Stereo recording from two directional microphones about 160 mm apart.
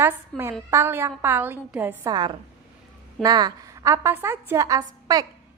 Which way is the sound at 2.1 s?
25° right (ahead or behind).